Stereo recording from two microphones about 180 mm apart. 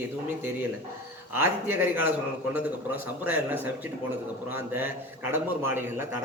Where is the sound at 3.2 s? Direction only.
10° right (ahead or behind).